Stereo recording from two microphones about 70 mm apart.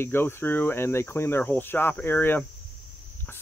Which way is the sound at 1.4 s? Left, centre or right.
Left.